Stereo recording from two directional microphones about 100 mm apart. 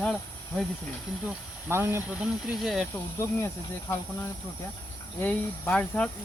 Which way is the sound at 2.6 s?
Centre (ahead or behind).